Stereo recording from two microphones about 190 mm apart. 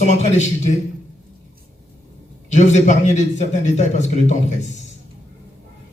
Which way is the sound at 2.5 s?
40° left (ahead or behind).